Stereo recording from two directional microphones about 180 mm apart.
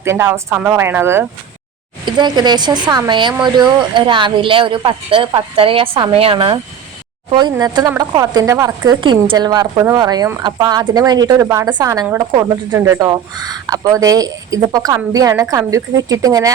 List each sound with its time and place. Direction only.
0.0 s speech: 15° right (ahead or behind)
2.0 s a woman's voice: 25° right (ahead or behind)